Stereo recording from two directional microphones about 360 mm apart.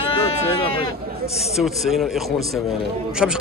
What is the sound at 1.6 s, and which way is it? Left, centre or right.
A man's voice, centre.